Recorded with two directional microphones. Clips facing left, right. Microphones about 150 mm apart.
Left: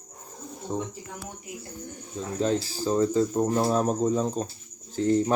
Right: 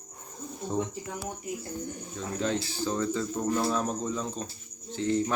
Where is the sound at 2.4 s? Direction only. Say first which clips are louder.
Left 4 dB; 35° left (ahead or behind).